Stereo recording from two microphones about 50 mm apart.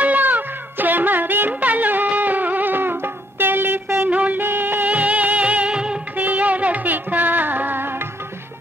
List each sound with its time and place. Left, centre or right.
0.0 s music: right
4.1 s music: right
4.4 s music: right
4.9 s music: right
6.1 s music: right